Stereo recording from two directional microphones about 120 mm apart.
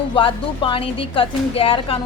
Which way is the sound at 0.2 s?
45° left (ahead or behind).